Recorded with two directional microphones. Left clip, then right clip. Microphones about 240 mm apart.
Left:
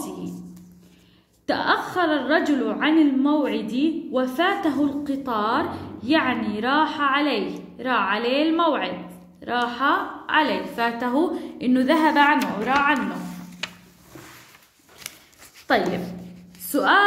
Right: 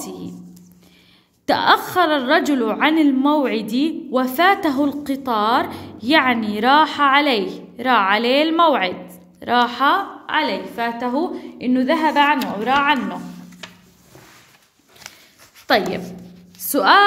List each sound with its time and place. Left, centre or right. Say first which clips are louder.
1.4 s a woman's voice: right 6 dB; right
10.3 s a woman's voice: right 1 dB; right
12.6 s a woman's voice: right 4 dB; right
15.6 s a woman's voice: right 3 dB; right